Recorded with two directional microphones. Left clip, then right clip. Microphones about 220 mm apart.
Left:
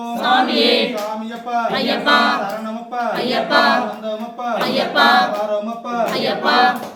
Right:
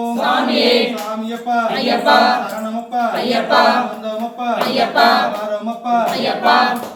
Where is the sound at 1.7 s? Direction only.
20° left (ahead or behind).